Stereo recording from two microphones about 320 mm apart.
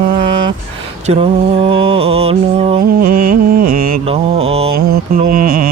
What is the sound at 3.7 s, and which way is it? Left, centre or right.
Mantra, right.